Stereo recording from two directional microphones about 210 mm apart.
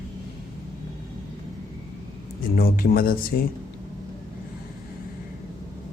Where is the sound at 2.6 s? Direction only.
45° left (ahead or behind).